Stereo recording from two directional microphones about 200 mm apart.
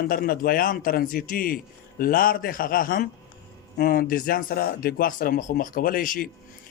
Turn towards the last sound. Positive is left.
turn(degrees=45)  # may be behind; listen again after turning